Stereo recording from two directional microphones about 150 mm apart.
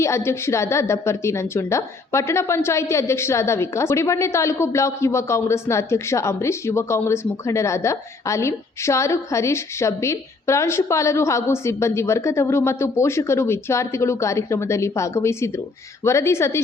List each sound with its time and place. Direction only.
0.0 s a woman's voice: 15° left (ahead or behind)